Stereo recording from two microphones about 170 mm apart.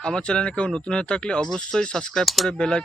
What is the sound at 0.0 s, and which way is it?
Speech, 5° left (ahead or behind).